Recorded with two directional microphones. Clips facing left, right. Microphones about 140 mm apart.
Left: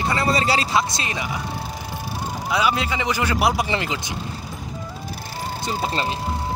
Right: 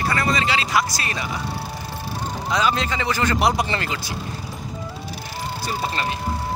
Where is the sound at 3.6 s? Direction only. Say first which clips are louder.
Left 1 dB; 15° left (ahead or behind).